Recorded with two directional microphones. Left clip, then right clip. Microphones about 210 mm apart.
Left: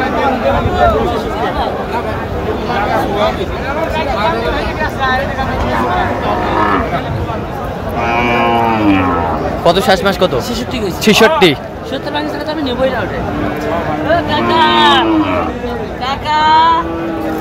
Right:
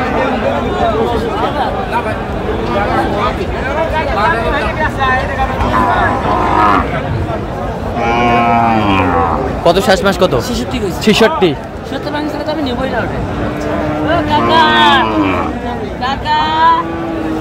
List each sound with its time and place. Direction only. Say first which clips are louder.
9.7 s speech: even; 5° right (ahead or behind)
14.6 s speech: left 1 dB; 10° left (ahead or behind)
16.3 s vehicle: left 2 dB; 20° left (ahead or behind)